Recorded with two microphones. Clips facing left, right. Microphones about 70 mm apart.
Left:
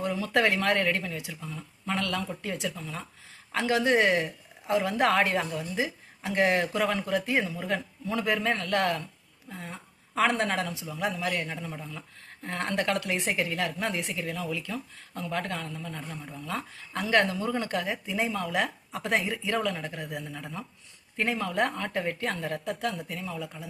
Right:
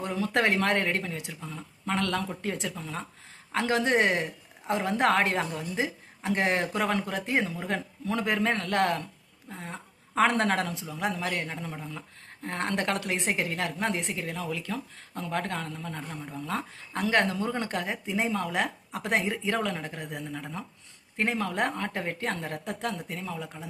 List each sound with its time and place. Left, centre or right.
0.0 s a woman's voice: right